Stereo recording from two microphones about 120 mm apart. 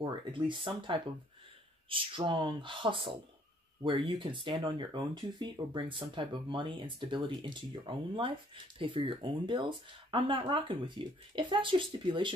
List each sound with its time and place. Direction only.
0.0 s speech: 45° right (ahead or behind)